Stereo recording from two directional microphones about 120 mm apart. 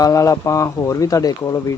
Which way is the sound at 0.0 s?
30° left (ahead or behind).